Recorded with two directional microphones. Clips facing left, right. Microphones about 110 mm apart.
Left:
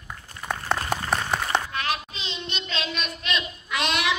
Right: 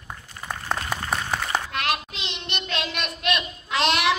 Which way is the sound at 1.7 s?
70° right (ahead or behind).